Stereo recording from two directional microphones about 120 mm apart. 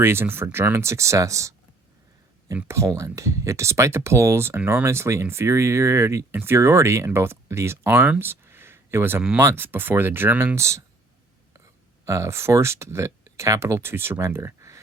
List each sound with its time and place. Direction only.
0.0 s speech: 20° right (ahead or behind)
2.6 s speech: 20° right (ahead or behind)
12.0 s speech: 25° right (ahead or behind)